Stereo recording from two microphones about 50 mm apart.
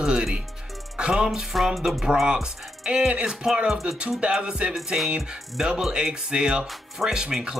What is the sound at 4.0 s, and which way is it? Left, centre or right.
Music, centre.